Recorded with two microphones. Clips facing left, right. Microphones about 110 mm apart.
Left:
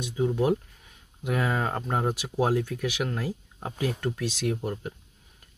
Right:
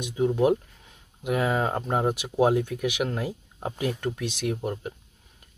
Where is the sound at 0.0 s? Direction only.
15° right (ahead or behind).